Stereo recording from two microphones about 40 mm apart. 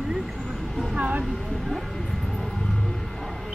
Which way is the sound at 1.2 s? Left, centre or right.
Centre.